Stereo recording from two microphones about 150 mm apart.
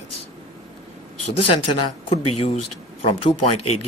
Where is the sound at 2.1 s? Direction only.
40° left (ahead or behind).